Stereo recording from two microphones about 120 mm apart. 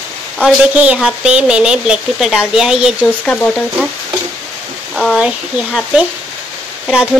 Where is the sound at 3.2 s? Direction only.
5° left (ahead or behind).